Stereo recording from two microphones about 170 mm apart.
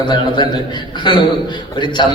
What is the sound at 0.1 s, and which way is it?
Speech, 25° left (ahead or behind).